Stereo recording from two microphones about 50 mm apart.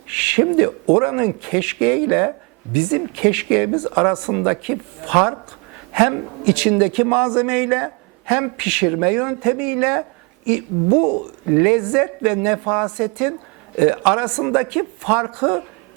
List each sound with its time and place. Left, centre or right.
0.1 s a sound: centre
0.9 s speech: centre
7.2 s speech: right
7.6 s speech: centre
8.3 s speech: centre
14.4 s speech: centre